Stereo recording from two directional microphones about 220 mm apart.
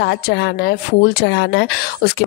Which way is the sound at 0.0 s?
55° left (ahead or behind).